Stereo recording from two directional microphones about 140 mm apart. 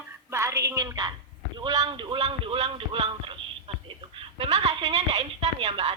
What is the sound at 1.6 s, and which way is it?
Speech, 30° right (ahead or behind).